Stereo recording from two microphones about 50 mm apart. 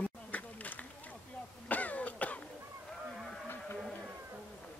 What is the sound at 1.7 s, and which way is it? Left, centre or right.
Cough, left.